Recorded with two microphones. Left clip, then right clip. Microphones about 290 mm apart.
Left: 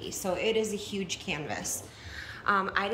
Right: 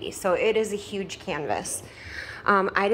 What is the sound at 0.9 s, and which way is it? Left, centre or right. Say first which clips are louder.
Speech: right 4 dB; right.